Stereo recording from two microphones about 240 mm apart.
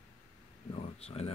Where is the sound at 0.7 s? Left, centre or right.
Left.